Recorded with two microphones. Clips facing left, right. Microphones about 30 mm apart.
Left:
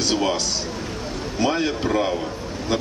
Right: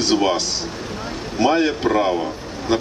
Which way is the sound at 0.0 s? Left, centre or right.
Centre.